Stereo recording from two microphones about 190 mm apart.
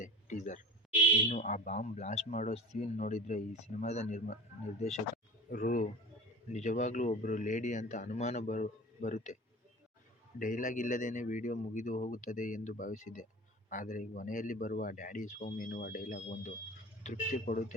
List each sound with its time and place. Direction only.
0.0 s a man's voice: 40° left (ahead or behind)